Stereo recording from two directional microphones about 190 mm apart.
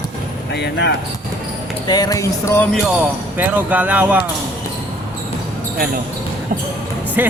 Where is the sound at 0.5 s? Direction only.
60° left (ahead or behind).